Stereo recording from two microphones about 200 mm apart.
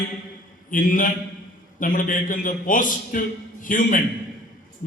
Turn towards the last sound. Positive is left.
turn(degrees=40)  # may be behind; listen again after turning